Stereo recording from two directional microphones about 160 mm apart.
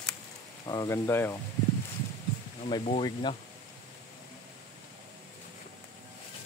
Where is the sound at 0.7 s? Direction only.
20° left (ahead or behind).